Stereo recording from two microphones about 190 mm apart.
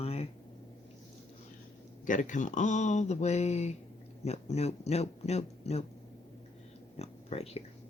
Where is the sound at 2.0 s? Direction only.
40° left (ahead or behind).